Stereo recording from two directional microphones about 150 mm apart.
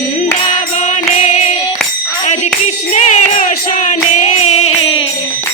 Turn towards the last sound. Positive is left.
turn(degrees=45)  # may be behind; listen again after turning